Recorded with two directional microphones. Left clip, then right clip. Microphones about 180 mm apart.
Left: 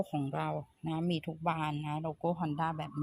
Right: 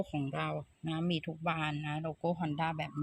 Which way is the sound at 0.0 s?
10° left (ahead or behind).